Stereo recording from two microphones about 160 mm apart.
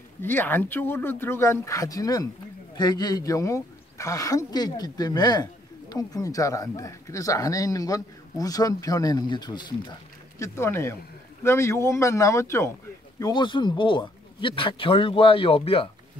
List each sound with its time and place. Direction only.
0.2 s speech: 10° left (ahead or behind); by 9.9 s 30° left (ahead or behind)
10.4 s speech: 15° left (ahead or behind)
13.2 s speech: 30° left (ahead or behind)